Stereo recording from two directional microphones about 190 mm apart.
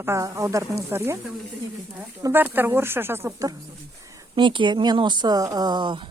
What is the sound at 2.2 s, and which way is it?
Speech, 15° right (ahead or behind).